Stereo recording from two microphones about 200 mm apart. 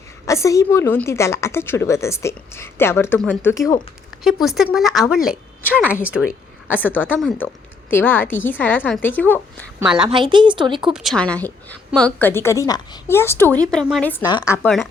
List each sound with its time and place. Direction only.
0.3 s a woman's voice: 15° left (ahead or behind)
4.2 s a woman's voice: centre (ahead or behind)
6.7 s a woman's voice: 10° left (ahead or behind)
9.8 s a woman's voice: 5° right (ahead or behind)
10.1 s speech: 25° right (ahead or behind)
10.9 s a woman's voice: centre (ahead or behind)
13.7 s a woman's voice: centre (ahead or behind)
14.1 s a woman's voice: 20° left (ahead or behind)